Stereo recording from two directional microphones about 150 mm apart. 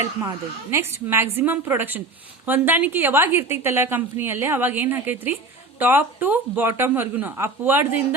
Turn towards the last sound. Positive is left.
turn(degrees=-15)  # may be behind; listen again after turning